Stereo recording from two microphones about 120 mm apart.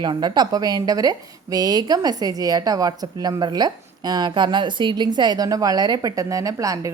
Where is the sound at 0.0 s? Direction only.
40° right (ahead or behind).